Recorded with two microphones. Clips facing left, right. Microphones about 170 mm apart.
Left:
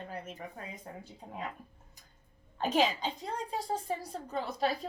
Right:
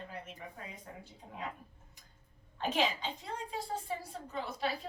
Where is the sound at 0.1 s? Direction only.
45° left (ahead or behind).